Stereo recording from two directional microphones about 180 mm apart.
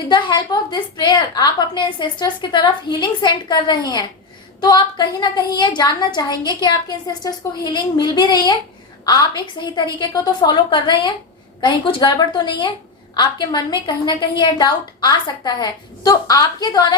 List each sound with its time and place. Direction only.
0.1 s a woman's voice: 25° left (ahead or behind)